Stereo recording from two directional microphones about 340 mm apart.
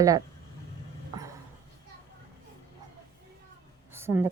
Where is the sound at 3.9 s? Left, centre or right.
Centre.